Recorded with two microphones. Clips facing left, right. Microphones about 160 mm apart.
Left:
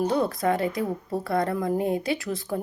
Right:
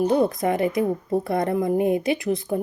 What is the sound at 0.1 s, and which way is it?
A woman's voice, 20° right (ahead or behind).